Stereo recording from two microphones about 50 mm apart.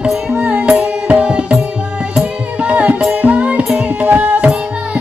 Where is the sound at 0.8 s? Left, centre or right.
Right.